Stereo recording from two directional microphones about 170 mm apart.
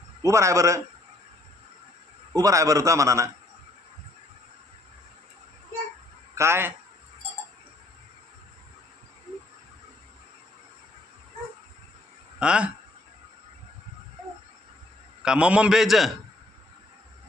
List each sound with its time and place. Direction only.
0.2 s a man's voice: 15° right (ahead or behind)
2.3 s a man's voice: 20° right (ahead or behind)
6.3 s a man's voice: 15° right (ahead or behind)
12.4 s a man's voice: 5° right (ahead or behind)
15.2 s a man's voice: 5° right (ahead or behind)